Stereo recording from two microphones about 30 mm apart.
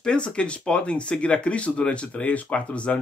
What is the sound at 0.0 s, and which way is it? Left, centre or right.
Speech, left.